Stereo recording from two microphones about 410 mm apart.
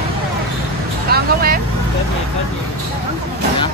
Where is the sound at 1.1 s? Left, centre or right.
Right.